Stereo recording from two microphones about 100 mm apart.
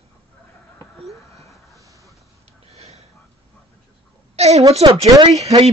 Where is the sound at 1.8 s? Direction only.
35° right (ahead or behind).